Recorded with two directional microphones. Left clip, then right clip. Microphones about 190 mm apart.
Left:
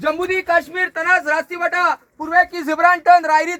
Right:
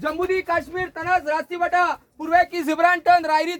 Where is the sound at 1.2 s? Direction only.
Centre (ahead or behind).